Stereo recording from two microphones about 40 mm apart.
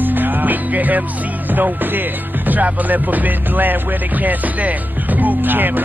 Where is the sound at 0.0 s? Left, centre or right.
Right.